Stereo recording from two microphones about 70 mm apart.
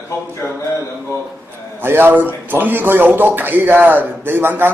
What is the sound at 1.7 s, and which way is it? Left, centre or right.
A man's voice, right.